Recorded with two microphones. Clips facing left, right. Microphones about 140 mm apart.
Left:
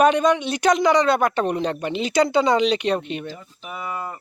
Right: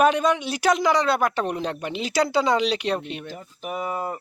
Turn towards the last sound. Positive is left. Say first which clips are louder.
# right 3 dB
turn(degrees=-40)  # may be behind; listen again after turning